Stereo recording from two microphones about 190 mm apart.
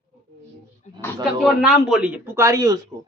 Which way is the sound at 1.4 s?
Centre (ahead or behind).